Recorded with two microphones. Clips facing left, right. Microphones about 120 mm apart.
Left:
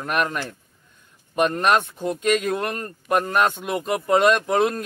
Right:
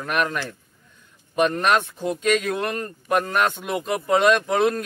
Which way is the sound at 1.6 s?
Centre (ahead or behind).